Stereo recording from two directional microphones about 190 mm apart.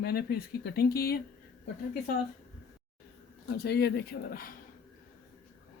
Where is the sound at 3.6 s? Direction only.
60° left (ahead or behind).